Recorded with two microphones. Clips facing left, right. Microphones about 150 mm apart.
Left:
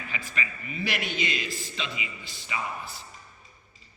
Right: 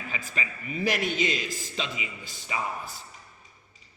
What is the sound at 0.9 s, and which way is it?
A man's voice, 40° right (ahead or behind).